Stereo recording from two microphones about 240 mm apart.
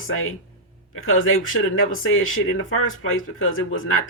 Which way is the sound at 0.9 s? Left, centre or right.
Left.